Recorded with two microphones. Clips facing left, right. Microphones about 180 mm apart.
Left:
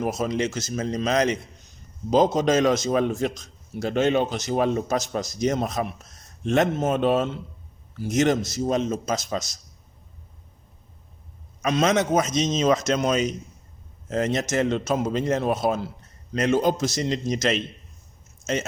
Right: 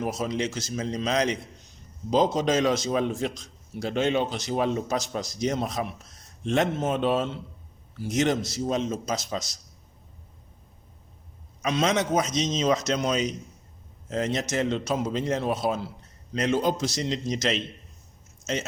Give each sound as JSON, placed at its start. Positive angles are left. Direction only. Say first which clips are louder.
{"t": 0.0, "sound": "a man's voice", "louder": "left 3 dB", "side_deg": 45}
{"t": 11.6, "sound": "a man's voice", "louder": "left 3 dB", "side_deg": 50}